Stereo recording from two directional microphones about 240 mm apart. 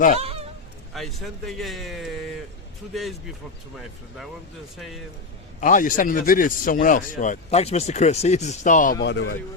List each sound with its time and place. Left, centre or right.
0.2 s honk: right
0.9 s a man's voice: centre
4.8 s a man's voice: centre
5.5 s speech: left
9.0 s speech: left